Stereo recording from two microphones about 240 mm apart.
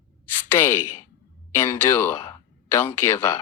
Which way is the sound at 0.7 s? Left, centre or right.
Left.